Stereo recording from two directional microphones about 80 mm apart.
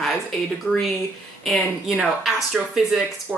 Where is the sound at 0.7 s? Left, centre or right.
Centre.